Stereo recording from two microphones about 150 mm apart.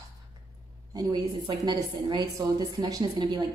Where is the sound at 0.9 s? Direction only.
25° right (ahead or behind).